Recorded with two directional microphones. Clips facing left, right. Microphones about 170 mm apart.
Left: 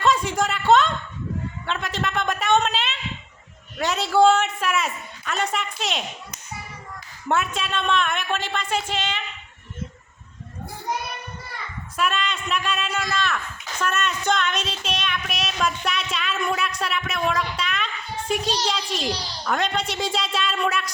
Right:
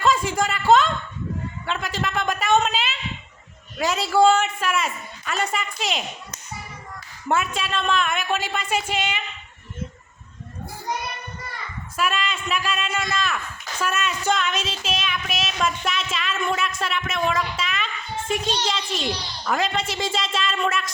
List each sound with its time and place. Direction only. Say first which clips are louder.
0.0 s a sound: even; centre (ahead or behind)
3.8 s speech: even; centre (ahead or behind)
7.3 s speech: even; centre (ahead or behind)
11.9 s speech: even; 5° right (ahead or behind)